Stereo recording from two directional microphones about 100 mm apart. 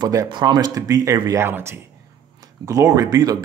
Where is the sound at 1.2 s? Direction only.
25° right (ahead or behind).